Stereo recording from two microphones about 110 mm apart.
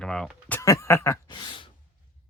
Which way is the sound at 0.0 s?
5° left (ahead or behind).